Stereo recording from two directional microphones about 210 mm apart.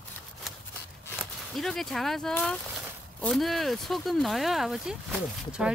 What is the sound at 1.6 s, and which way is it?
Speech, centre (ahead or behind).